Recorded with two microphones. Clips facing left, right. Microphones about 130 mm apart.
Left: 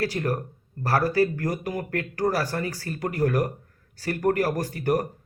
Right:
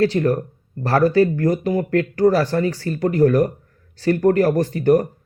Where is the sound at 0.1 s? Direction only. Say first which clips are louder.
Right 8 dB; 35° right (ahead or behind).